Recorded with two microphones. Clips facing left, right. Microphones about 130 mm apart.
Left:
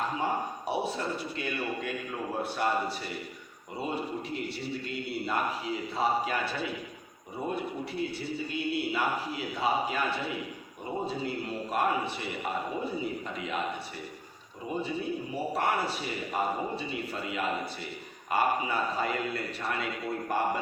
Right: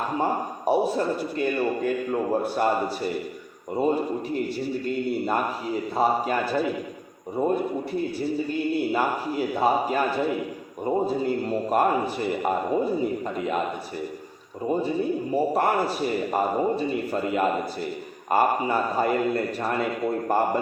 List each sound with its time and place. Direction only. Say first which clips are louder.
0.2 s a man's voice: right 5 dB; 45° right (ahead or behind)
14.7 s a man's voice: right 8 dB; 40° right (ahead or behind)